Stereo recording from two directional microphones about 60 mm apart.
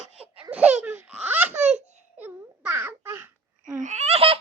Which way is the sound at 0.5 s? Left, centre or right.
Right.